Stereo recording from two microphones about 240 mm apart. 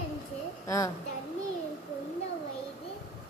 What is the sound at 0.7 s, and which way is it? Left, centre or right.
Speech, centre.